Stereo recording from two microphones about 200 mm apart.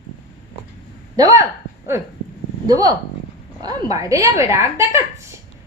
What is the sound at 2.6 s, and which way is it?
A man's voice, 20° right (ahead or behind).